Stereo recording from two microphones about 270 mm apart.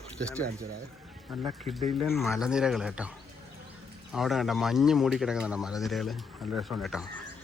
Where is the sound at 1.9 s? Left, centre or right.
Centre.